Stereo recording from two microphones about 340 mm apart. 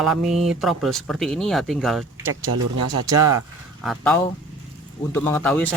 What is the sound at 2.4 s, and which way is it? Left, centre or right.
Speech, right.